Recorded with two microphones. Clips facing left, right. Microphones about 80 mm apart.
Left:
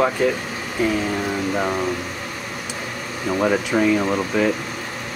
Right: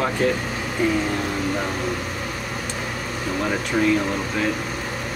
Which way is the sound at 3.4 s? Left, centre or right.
Centre.